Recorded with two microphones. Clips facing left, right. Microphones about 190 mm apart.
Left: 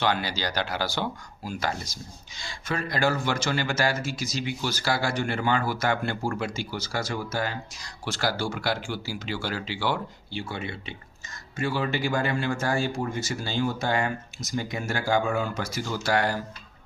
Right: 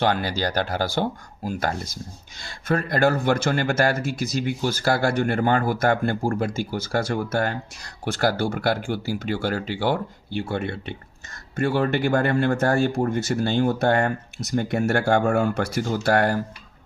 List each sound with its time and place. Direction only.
0.0 s a man's voice: 50° right (ahead or behind)